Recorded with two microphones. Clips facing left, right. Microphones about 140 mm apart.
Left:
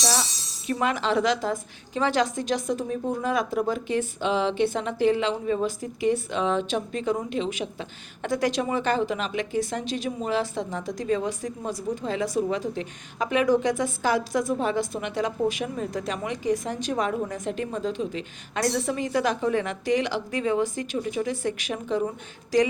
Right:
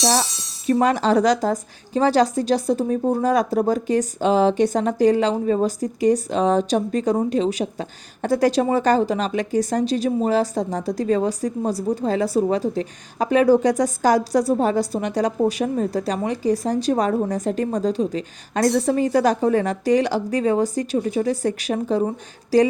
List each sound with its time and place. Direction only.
0.7 s a woman's voice: 40° right (ahead or behind)